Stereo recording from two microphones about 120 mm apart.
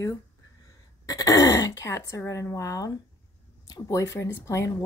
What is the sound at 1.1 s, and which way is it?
Speech, 30° left (ahead or behind).